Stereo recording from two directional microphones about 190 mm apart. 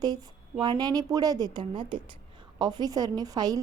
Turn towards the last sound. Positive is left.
turn(degrees=-20)  # may be behind; listen again after turning